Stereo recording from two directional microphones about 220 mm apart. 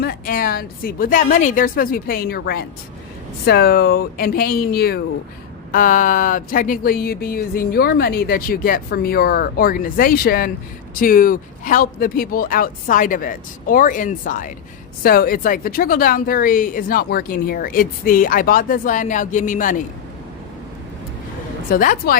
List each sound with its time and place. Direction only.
0.0 s a woman's voice: 40° left (ahead or behind)
21.7 s a woman's voice: 40° left (ahead or behind)